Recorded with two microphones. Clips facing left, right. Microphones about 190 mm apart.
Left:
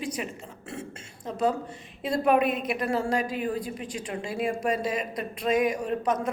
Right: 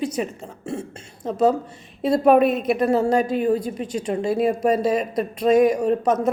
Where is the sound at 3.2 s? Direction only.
25° right (ahead or behind).